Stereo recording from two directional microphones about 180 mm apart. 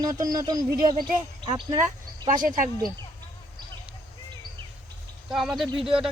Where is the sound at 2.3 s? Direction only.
45° right (ahead or behind).